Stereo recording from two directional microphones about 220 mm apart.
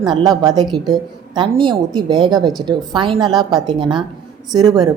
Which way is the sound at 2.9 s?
20° right (ahead or behind).